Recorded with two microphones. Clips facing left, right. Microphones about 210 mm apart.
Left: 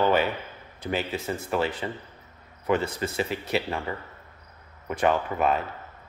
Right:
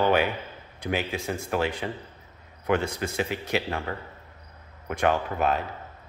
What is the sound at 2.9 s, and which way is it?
Speech, 10° right (ahead or behind).